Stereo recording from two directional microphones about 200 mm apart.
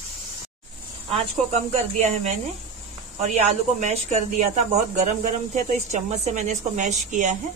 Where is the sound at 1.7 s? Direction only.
35° right (ahead or behind).